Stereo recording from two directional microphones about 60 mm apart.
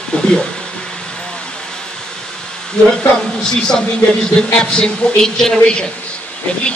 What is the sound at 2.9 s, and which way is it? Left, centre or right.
A man's voice, centre.